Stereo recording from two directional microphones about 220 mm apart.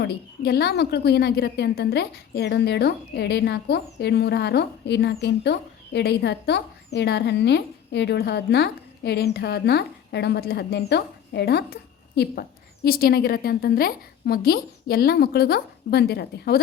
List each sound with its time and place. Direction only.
0.0 s a woman's voice: 45° left (ahead or behind)